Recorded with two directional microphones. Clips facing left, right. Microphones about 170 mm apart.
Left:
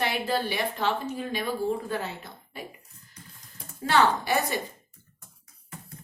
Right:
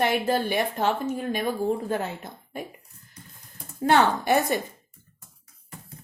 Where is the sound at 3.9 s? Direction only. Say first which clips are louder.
Right 2 dB; 50° right (ahead or behind).